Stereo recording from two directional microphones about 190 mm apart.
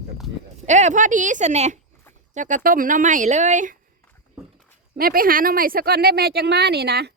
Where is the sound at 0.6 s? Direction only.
40° right (ahead or behind).